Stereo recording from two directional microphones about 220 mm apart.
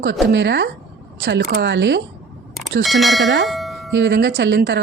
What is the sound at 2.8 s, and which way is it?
Speech, centre (ahead or behind).